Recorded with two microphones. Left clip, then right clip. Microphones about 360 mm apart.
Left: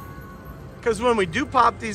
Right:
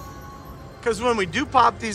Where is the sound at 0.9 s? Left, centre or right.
Centre.